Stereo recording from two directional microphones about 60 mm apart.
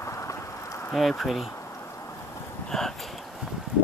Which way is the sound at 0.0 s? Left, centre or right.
Left.